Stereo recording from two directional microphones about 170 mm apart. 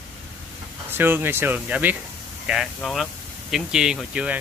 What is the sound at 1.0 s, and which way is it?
Speech, 15° right (ahead or behind).